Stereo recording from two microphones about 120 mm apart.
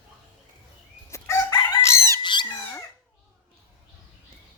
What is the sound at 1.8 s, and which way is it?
Chicken, 25° left (ahead or behind).